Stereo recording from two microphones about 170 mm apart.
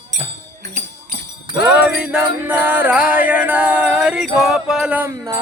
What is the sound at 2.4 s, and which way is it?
Jingle bell, 10° right (ahead or behind).